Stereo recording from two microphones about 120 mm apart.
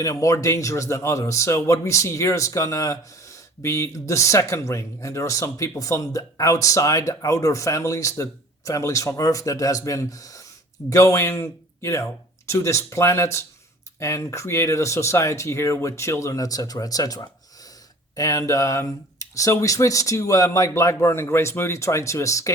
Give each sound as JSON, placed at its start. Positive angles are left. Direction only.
{"t": 0.0, "sound": "speech", "side_deg": 30}